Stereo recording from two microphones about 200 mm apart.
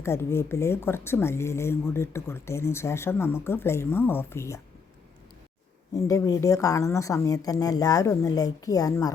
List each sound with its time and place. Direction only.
0.0 s speech: 15° left (ahead or behind)
5.9 s speech: 15° left (ahead or behind)